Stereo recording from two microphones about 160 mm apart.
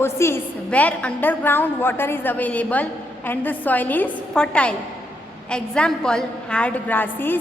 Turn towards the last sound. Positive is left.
turn(degrees=10)  # may be behind; listen again after turning